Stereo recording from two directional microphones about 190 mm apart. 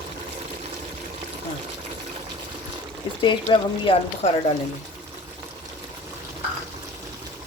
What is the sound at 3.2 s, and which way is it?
Speech, 25° left (ahead or behind).